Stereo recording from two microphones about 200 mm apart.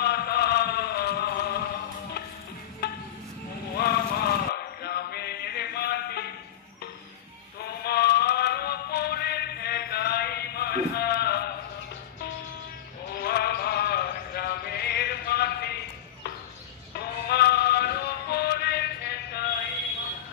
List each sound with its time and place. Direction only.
0.0 s chant: 55° left (ahead or behind)
2.8 s a sound: 55° left (ahead or behind)
3.7 s vehicle: 50° left (ahead or behind)
4.8 s music: 55° left (ahead or behind)
7.8 s music: 55° left (ahead or behind)
13.2 s a sound: 50° left (ahead or behind)
17.0 s music: 55° left (ahead or behind)